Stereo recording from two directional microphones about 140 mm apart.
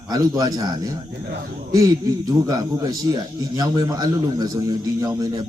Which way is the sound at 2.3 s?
25° right (ahead or behind).